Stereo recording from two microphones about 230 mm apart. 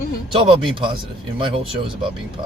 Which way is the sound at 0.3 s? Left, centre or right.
Right.